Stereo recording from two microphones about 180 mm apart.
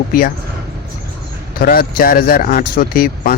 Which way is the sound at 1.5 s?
55° left (ahead or behind).